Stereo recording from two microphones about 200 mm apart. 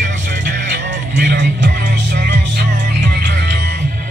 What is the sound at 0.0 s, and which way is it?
Music, 45° right (ahead or behind).